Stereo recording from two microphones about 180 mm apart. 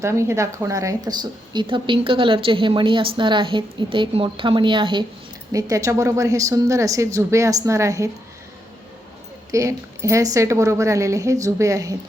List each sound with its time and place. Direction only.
0.0 s a woman's voice: 15° right (ahead or behind)
9.5 s a woman's voice: 15° right (ahead or behind)